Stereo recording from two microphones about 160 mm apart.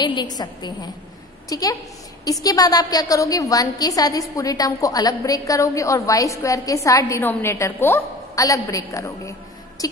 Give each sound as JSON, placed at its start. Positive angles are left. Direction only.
{"t": 0.0, "sound": "a woman's voice", "side_deg": 30}